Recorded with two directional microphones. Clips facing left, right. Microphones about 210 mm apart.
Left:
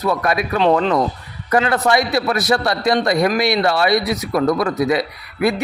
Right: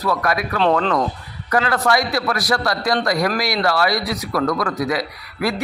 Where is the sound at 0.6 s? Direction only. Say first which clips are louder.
Left 2 dB; 10° left (ahead or behind).